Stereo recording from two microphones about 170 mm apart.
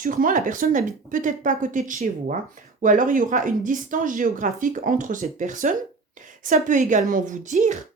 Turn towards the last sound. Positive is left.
turn(degrees=-45)  # may be behind; listen again after turning